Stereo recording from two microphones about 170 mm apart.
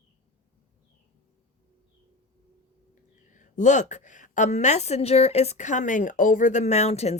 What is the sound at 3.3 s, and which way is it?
A woman's voice, 45° left (ahead or behind).